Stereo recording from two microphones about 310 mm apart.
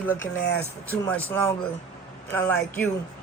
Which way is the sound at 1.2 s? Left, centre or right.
Centre.